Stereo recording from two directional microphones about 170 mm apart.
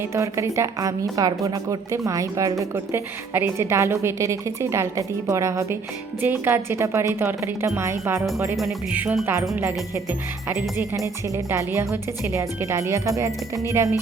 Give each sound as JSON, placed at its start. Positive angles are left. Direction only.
{"t": 0.1, "sound": "a woman's voice", "side_deg": -20}
{"t": 8.5, "sound": "a woman's voice", "side_deg": -5}